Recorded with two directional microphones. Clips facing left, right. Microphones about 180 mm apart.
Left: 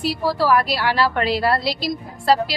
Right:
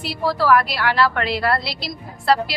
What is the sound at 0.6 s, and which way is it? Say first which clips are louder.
A woman's voice: even; 40° left (ahead or behind).